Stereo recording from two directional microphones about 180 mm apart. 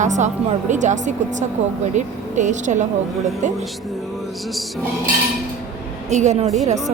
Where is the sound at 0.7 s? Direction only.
40° right (ahead or behind).